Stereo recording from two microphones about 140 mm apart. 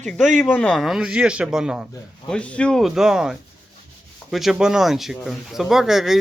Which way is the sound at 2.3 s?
10° left (ahead or behind).